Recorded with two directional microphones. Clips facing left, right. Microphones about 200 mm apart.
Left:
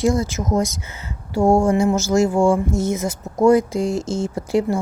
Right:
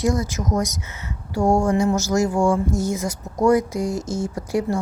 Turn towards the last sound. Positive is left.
turn(degrees=25)  # may be behind; listen again after turning